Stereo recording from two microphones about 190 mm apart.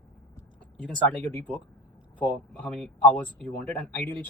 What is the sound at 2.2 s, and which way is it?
Speech, 5° left (ahead or behind).